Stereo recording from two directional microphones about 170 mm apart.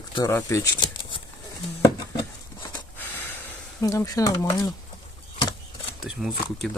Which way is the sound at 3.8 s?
20° left (ahead or behind).